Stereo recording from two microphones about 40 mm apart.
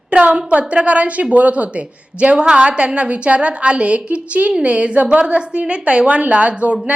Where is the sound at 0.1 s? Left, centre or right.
Right.